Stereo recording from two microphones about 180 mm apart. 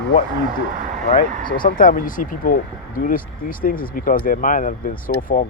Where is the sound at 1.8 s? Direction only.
50° left (ahead or behind).